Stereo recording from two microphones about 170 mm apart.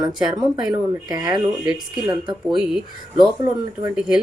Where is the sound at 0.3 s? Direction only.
20° right (ahead or behind).